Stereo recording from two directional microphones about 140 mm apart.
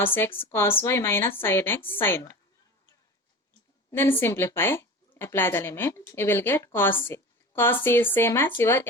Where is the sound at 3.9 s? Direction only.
15° left (ahead or behind).